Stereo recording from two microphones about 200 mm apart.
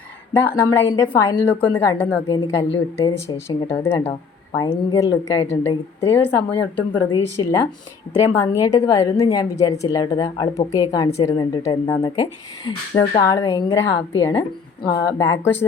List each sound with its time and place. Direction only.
0.4 s a woman's voice: 15° left (ahead or behind)
6.9 s a woman's voice: 25° left (ahead or behind)